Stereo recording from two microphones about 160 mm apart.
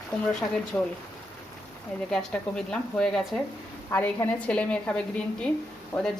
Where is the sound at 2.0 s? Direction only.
5° left (ahead or behind).